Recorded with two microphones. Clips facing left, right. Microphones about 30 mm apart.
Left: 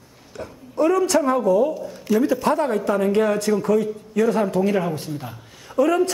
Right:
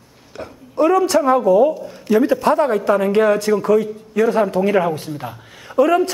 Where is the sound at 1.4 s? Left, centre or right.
Right.